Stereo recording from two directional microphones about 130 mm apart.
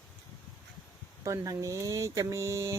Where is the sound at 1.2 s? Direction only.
25° right (ahead or behind).